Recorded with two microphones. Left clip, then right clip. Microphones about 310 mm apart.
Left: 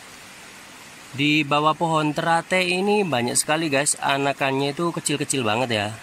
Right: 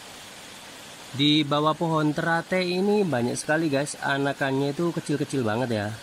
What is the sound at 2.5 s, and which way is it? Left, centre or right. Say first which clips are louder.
Speech: left 3 dB; left.